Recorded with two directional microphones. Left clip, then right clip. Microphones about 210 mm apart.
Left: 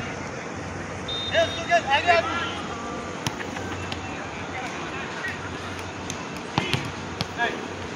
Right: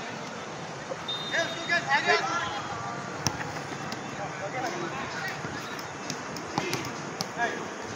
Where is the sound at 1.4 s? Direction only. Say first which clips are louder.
Left 7 dB; 35° left (ahead or behind).